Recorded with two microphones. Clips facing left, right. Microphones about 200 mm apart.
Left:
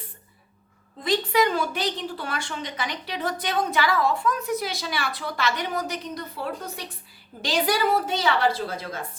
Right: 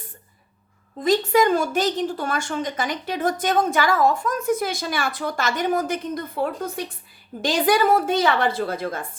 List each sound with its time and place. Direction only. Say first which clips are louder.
1.0 s speech: right 4 dB; 45° right (ahead or behind)